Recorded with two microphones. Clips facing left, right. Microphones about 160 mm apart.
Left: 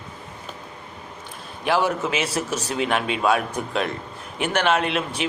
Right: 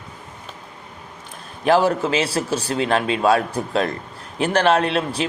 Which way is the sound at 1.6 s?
40° right (ahead or behind).